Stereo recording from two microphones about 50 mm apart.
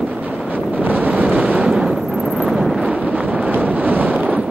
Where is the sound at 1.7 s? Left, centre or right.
Centre.